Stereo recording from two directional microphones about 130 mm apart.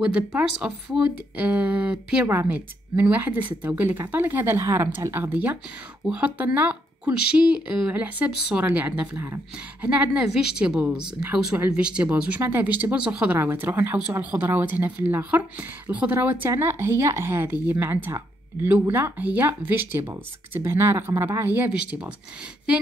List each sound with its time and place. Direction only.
0.6 s speech: 10° right (ahead or behind)